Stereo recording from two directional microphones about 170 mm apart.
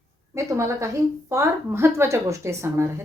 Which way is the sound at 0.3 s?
15° right (ahead or behind).